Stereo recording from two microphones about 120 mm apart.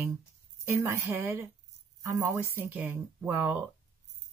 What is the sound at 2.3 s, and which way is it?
Speech, 15° right (ahead or behind).